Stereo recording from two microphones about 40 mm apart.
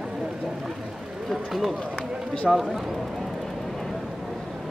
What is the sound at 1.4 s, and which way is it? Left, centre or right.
Speech, centre.